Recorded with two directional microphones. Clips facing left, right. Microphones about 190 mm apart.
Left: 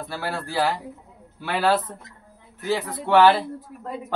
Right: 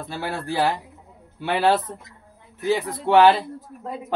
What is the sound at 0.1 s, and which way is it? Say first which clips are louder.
A man's voice: right 2 dB; 20° right (ahead or behind).